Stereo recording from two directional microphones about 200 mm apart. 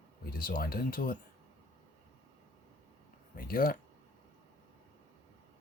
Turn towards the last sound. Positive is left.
turn(degrees=45)  # may be behind; listen again after turning